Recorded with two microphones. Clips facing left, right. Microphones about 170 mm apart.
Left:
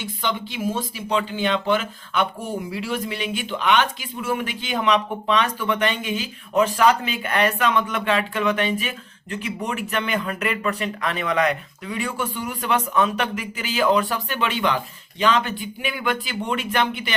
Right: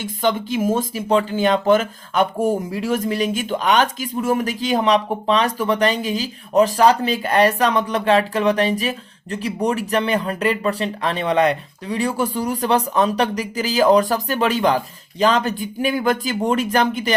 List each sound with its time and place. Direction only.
0.0 s speech: 45° right (ahead or behind)